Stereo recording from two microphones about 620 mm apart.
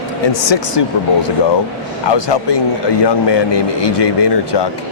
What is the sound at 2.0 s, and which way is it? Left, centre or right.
Speech, left.